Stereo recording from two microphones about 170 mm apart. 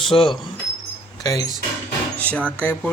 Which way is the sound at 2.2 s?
10° left (ahead or behind).